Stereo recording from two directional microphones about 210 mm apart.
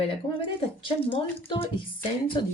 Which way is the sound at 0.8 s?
25° left (ahead or behind).